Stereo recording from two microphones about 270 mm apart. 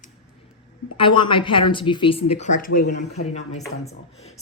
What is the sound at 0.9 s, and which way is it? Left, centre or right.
Speech, centre.